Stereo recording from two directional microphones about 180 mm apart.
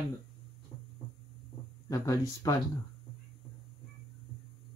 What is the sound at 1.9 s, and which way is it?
Speech, 20° left (ahead or behind).